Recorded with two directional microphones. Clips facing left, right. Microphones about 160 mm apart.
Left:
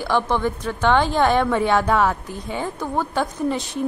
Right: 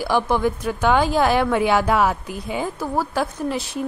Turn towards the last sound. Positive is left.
turn(degrees=-5)  # may be behind; listen again after turning